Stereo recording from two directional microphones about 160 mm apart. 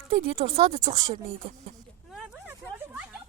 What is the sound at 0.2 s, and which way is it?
Speech, 35° right (ahead or behind).